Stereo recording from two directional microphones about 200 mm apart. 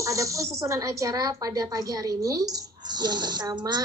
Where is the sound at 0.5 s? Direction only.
15° right (ahead or behind).